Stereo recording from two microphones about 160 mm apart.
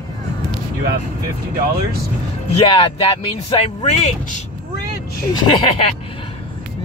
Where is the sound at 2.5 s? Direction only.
35° left (ahead or behind).